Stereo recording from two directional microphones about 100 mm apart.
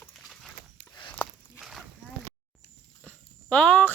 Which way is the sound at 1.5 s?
Centre (ahead or behind).